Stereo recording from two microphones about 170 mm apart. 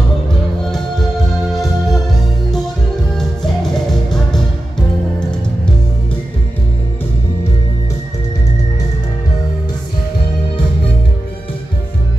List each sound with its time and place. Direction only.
1.5 s music: centre (ahead or behind)